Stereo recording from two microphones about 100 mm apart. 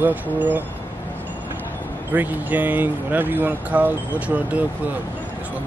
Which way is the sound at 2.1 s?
20° right (ahead or behind).